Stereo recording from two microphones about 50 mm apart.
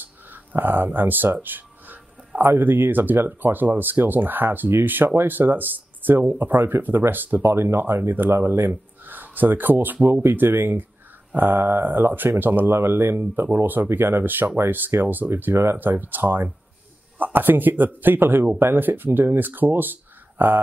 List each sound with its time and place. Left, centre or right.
0.0 s speech: right
7.4 s speech: right